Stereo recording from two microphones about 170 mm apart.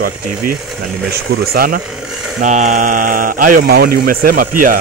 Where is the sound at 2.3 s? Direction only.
45° right (ahead or behind).